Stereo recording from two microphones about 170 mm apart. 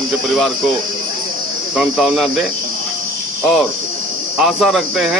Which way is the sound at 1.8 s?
Centre (ahead or behind).